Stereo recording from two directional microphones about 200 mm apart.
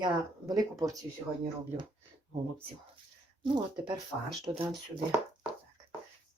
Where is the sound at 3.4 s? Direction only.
20° right (ahead or behind).